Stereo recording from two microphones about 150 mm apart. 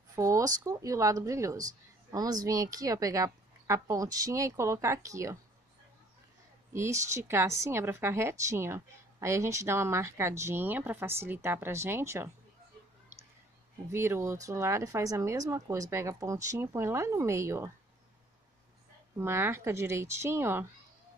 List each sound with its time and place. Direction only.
0.1 s speech: 20° right (ahead or behind)
6.7 s a woman's voice: 20° right (ahead or behind)
13.9 s speech: 15° right (ahead or behind)
19.1 s a woman's voice: 15° right (ahead or behind)